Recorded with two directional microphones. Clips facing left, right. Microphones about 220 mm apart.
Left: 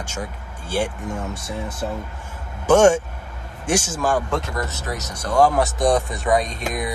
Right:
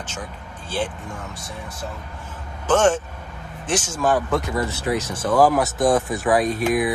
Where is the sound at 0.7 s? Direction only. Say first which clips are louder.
Left 3 dB; 10° left (ahead or behind).